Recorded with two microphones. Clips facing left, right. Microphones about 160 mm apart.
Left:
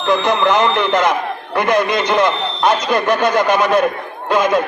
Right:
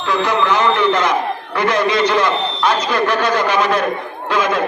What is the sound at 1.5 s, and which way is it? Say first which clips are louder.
Speech: left 1 dB; 50° left (ahead or behind).